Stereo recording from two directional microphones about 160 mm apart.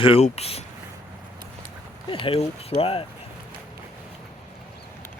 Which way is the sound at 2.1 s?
35° left (ahead or behind).